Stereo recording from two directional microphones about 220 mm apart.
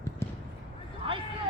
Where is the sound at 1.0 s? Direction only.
20° right (ahead or behind).